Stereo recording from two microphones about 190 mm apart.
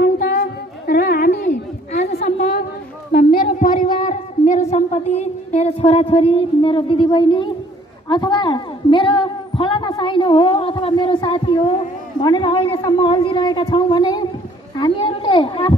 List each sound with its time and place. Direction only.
0.0 s music: 50° left (ahead or behind)
2.1 s a sound: 45° left (ahead or behind); by 7.5 s 25° left (ahead or behind)
8.1 s a woman's voice: 20° left (ahead or behind)